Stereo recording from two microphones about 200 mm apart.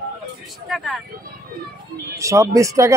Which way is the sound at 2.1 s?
15° right (ahead or behind).